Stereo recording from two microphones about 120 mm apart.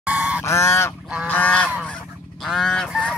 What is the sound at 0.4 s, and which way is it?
Goose, 25° left (ahead or behind).